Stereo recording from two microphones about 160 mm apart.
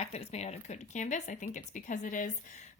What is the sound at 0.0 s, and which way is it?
Speech, 40° left (ahead or behind).